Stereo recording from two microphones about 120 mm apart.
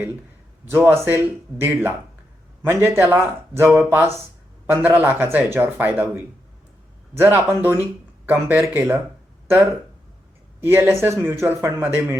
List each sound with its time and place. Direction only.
0.7 s speech: 20° right (ahead or behind)
10.6 s speech: 20° right (ahead or behind)